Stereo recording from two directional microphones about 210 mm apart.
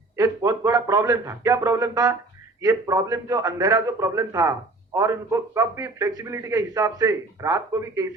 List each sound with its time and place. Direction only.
0.2 s a man's voice: 15° right (ahead or behind)